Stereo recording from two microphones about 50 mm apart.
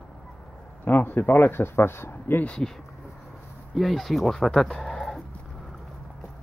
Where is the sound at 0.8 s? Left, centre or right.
Left.